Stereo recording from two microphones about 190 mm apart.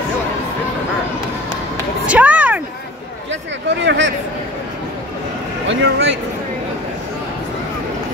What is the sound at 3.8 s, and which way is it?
Speech, 75° right (ahead or behind).